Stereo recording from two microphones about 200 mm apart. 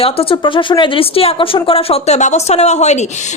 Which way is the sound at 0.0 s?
30° left (ahead or behind).